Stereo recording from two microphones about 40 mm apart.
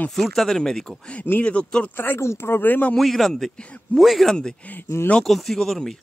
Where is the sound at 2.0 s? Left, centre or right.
Left.